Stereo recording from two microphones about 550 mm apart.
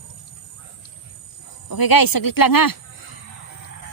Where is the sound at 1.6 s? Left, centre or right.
Left.